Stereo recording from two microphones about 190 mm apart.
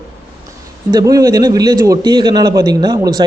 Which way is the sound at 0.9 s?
20° right (ahead or behind).